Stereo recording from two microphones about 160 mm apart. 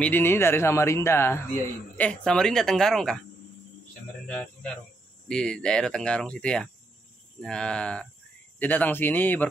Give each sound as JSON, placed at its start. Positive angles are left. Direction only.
{"t": 0.0, "sound": "speech", "side_deg": 15}
{"t": 4.3, "sound": "speech", "side_deg": 10}